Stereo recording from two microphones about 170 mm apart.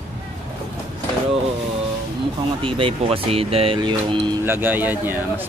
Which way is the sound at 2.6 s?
30° right (ahead or behind).